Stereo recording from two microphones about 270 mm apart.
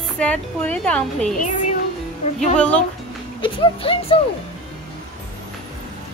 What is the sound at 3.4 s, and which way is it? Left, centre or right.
Speech, centre.